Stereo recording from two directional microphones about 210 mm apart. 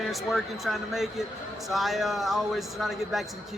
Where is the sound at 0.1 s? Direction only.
Centre (ahead or behind).